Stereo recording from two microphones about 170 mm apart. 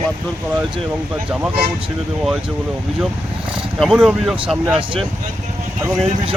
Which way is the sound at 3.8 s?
5° right (ahead or behind).